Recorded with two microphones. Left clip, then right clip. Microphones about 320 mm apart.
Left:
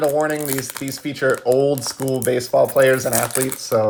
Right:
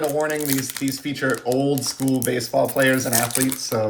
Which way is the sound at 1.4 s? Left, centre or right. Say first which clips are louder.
Left 5 dB; left.